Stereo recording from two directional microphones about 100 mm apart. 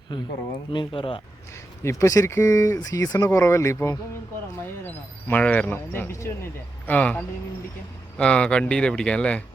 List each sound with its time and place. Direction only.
0.1 s speech: 55° left (ahead or behind)
1.8 s speech: 30° left (ahead or behind)
4.9 s speech: 15° left (ahead or behind)
6.8 s speech: 15° left (ahead or behind)